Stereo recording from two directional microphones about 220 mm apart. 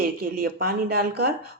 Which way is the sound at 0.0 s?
45° right (ahead or behind).